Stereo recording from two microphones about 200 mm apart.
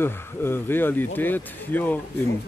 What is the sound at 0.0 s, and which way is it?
A man's voice, 10° left (ahead or behind).